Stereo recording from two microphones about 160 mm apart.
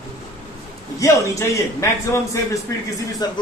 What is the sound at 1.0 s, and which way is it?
Speech, 20° left (ahead or behind).